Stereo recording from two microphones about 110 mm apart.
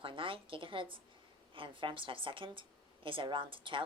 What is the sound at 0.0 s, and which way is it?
A woman's voice, 55° right (ahead or behind).